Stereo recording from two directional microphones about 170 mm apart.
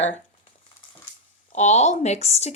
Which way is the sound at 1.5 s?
40° left (ahead or behind).